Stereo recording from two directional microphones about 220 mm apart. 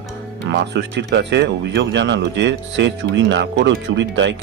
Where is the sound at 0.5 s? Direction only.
50° right (ahead or behind).